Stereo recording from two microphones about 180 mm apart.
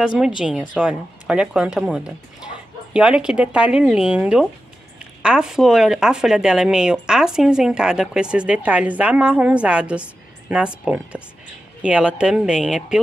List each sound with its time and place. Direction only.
0.0 s speech: 5° right (ahead or behind)